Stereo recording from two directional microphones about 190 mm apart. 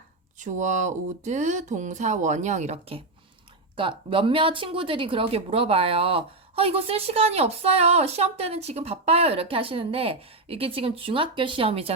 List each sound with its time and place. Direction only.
0.3 s speech: 40° right (ahead or behind)
3.8 s speech: 25° right (ahead or behind)